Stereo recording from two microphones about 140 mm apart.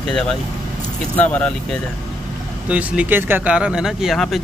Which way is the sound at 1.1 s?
10° left (ahead or behind).